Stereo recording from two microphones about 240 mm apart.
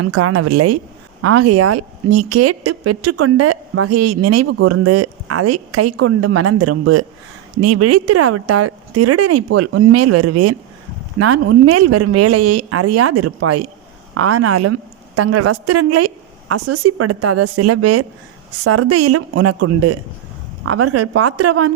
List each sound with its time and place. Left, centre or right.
0.0 s speech: right
7.6 s a woman's voice: right